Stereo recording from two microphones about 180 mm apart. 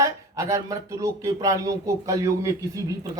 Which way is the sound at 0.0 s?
15° right (ahead or behind).